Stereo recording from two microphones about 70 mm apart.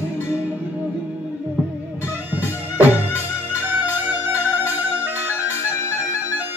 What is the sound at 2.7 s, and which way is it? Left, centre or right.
Music, right.